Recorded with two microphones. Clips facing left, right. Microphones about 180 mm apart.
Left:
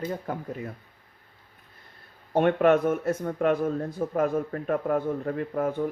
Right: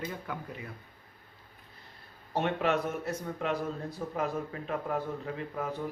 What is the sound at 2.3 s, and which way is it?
Speech, 50° left (ahead or behind).